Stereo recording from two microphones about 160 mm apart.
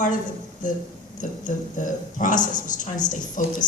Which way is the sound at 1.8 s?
55° left (ahead or behind).